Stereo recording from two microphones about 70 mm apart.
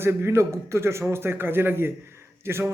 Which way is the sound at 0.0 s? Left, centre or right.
Right.